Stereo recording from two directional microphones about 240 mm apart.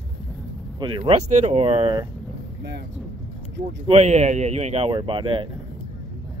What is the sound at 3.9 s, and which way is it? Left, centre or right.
Speech, right.